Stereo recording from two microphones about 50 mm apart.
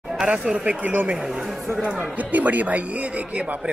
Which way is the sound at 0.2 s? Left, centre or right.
Centre.